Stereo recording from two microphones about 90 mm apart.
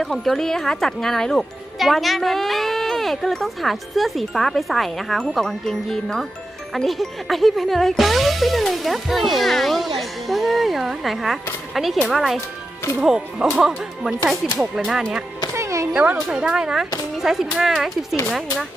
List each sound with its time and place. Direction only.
0.0 s speech: 5° left (ahead or behind)
15.5 s a sound: 35° right (ahead or behind)
15.9 s speech: 10° right (ahead or behind)